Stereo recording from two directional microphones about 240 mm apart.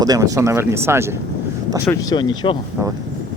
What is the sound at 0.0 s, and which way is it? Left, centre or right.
Speech, centre.